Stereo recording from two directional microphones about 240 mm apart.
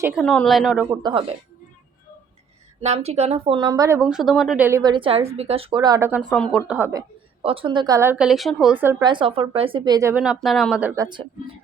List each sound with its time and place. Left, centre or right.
0.0 s a woman's voice: centre
2.8 s speech: right; by 7.0 s centre
7.4 s speech: right; by 8.7 s centre
8.8 s speech: centre